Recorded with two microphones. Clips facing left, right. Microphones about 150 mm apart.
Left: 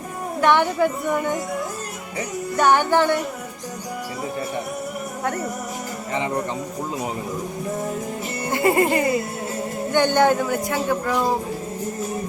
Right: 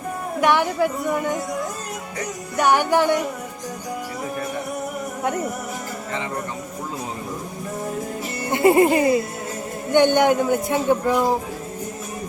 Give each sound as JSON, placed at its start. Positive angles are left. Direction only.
{"t": 0.4, "sound": "a woman's voice", "side_deg": -5}
{"t": 2.6, "sound": "music", "side_deg": -10}
{"t": 8.5, "sound": "a man's voice", "side_deg": -20}
{"t": 11.1, "sound": "music", "side_deg": -15}